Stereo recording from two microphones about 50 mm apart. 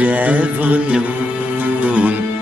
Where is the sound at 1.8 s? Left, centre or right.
Right.